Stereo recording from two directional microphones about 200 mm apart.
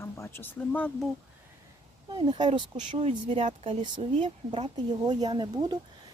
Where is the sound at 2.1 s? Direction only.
20° right (ahead or behind).